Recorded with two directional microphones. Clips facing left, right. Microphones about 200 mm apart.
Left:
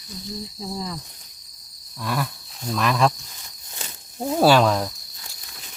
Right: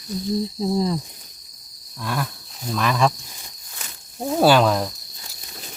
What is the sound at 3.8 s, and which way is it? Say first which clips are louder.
Snake: left 3 dB; 25° left (ahead or behind).